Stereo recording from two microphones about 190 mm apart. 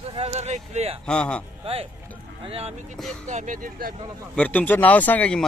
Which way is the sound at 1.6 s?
30° right (ahead or behind).